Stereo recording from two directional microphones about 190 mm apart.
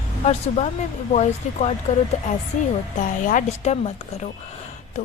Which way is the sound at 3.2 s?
45° left (ahead or behind).